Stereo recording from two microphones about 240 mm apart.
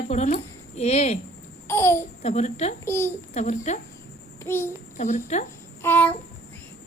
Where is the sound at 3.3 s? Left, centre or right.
Left.